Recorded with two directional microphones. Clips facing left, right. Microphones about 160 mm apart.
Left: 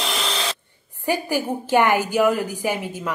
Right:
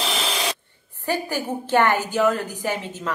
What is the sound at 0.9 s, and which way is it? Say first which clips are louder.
A woman's voice: left 3 dB; 10° left (ahead or behind).